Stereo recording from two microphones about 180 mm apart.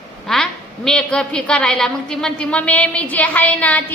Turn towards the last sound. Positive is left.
turn(degrees=10)  # may be behind; listen again after turning